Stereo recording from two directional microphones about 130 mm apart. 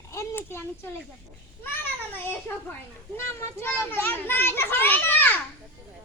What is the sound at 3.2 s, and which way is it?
A child's voice, 20° left (ahead or behind).